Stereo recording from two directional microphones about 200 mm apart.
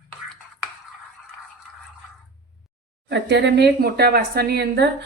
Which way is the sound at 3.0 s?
60° right (ahead or behind).